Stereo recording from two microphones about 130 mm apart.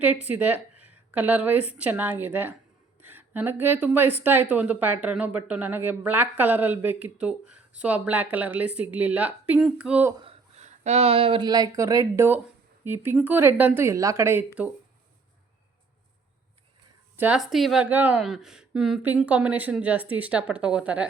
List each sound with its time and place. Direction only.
0.0 s a woman's voice: 15° right (ahead or behind)
10.2 s a sound: 55° right (ahead or behind)
11.4 s a woman's voice: 30° right (ahead or behind)
17.2 s speech: 10° right (ahead or behind)
17.8 s a woman's voice: 10° right (ahead or behind)
18.2 s a woman's voice: centre (ahead or behind)